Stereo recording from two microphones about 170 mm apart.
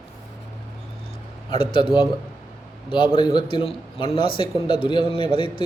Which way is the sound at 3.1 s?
30° left (ahead or behind).